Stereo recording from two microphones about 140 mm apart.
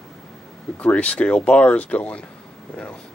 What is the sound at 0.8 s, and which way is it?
Speech, 10° left (ahead or behind).